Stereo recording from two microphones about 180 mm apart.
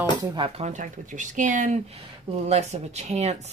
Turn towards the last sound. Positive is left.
turn(degrees=-40)  # may be behind; listen again after turning